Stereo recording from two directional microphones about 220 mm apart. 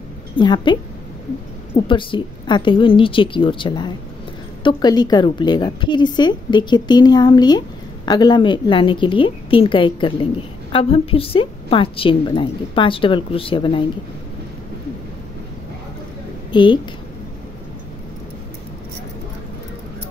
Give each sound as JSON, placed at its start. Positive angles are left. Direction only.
{"t": 0.4, "sound": "a woman's voice", "side_deg": 20}
{"t": 1.9, "sound": "a woman's voice", "side_deg": 20}
{"t": 16.5, "sound": "a woman's voice", "side_deg": 20}